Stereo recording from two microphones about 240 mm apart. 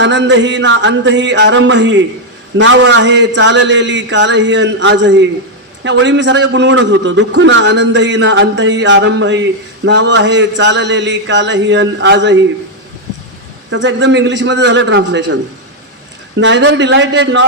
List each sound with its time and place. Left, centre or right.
0.0 s a man's voice: right
13.7 s a man's voice: right
16.4 s a man's voice: right